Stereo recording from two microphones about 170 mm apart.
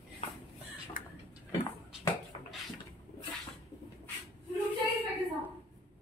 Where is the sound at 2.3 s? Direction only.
35° left (ahead or behind).